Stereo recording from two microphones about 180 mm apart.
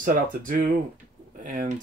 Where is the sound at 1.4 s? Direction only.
45° right (ahead or behind).